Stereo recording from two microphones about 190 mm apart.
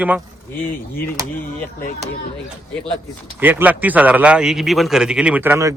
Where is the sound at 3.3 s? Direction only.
10° right (ahead or behind).